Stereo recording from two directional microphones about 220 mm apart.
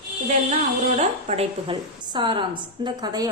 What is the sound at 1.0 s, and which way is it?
A woman's voice, 30° right (ahead or behind).